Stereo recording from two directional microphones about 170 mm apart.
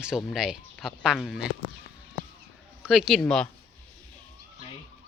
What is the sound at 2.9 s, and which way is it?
Speech, centre (ahead or behind).